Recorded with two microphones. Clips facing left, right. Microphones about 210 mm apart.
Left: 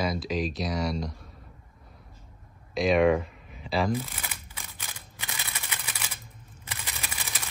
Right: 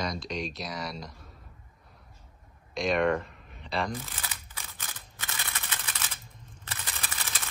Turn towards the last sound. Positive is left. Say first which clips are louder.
# left 1 dB
turn(degrees=15)  # may be behind; listen again after turning